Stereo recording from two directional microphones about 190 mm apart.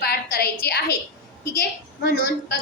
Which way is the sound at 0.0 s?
55° left (ahead or behind).